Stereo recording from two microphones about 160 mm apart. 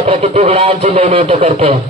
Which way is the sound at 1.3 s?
45° right (ahead or behind).